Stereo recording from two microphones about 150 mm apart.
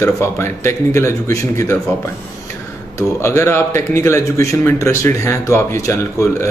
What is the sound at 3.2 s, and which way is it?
Speech, 15° left (ahead or behind).